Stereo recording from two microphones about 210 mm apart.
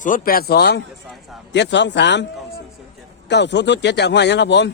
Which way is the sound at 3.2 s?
55° left (ahead or behind).